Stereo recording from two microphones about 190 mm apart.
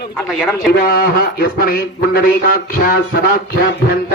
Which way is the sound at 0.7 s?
55° left (ahead or behind).